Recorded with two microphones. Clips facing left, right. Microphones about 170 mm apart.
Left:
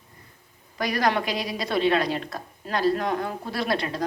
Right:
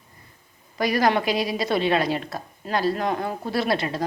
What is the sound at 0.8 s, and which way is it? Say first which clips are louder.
A woman's voice: right 3 dB; 5° right (ahead or behind).